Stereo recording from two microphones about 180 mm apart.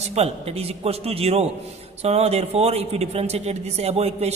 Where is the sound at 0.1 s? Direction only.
35° right (ahead or behind).